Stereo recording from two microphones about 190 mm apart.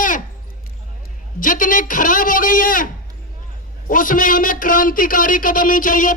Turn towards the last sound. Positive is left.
turn(degrees=45)  # may be behind; listen again after turning